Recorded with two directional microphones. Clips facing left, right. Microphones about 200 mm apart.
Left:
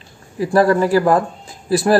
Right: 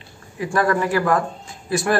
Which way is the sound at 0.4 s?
35° left (ahead or behind).